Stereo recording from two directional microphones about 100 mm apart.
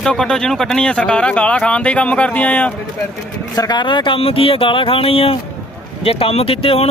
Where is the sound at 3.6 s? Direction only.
45° left (ahead or behind).